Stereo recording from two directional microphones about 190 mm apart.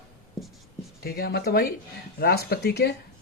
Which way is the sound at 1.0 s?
55° left (ahead or behind).